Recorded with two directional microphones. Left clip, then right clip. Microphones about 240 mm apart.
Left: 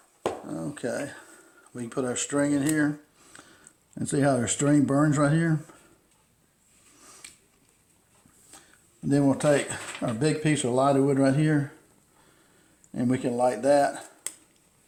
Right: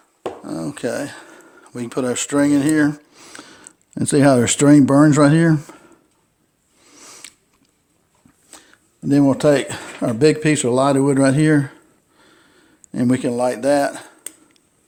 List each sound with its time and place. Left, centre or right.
0.4 s speech: right
6.9 s a sound: right
8.4 s speech: right
12.9 s speech: right